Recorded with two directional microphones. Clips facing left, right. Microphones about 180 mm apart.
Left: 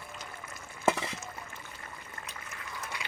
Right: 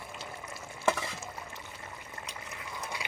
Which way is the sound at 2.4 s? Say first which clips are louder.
Right 2 dB; 20° right (ahead or behind).